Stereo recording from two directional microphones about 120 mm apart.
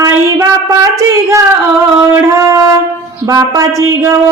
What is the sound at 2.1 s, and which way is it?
Speech, 20° right (ahead or behind).